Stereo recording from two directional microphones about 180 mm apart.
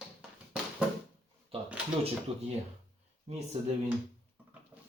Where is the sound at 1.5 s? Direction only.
30° right (ahead or behind).